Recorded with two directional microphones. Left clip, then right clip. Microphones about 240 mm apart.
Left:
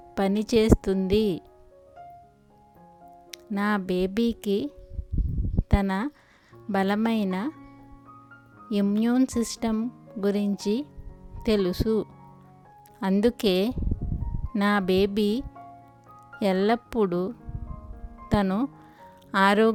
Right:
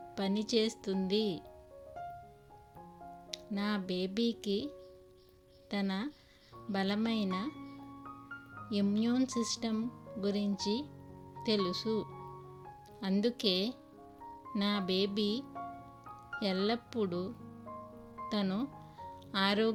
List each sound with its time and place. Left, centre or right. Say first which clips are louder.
0.1 s speech: left 10 dB; left
3.5 s speech: left 11 dB; left
8.7 s speech: left 8 dB; left
16.4 s speech: left 11 dB; left